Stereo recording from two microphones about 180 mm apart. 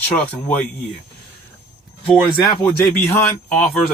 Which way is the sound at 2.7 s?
10° left (ahead or behind).